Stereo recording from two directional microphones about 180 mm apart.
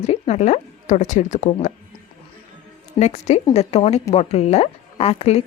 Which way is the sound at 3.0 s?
40° left (ahead or behind).